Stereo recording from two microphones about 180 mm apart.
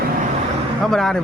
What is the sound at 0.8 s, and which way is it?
Speech, centre (ahead or behind).